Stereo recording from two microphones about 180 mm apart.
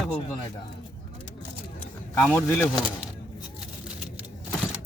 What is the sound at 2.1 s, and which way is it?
Speech, 5° left (ahead or behind).